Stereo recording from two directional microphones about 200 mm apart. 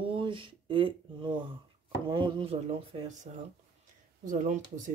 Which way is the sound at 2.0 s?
25° right (ahead or behind).